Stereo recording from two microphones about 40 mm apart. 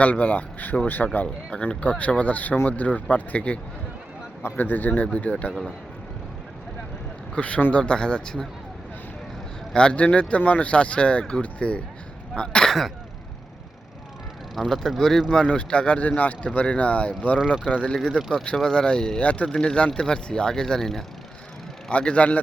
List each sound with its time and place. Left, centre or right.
0.0 s speech: left
4.5 s a man's voice: left
5.3 s speech: left
7.3 s speech: left
9.7 s speech: left
14.5 s speech: centre
15.3 s speech: left
18.5 s speech: centre
19.2 s speech: left; by 21.0 s centre
21.8 s speech: left